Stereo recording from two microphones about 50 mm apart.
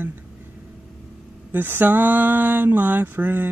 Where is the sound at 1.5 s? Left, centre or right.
Right.